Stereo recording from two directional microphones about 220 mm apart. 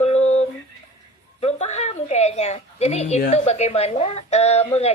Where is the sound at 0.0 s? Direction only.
30° left (ahead or behind).